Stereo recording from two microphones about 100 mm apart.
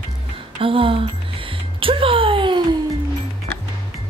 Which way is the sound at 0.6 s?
65° right (ahead or behind).